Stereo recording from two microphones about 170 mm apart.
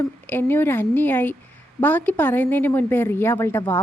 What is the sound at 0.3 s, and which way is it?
A woman's voice, 10° left (ahead or behind).